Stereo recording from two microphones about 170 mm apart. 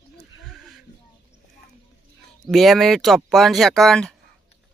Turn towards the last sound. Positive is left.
turn(degrees=5)  # may be behind; listen again after turning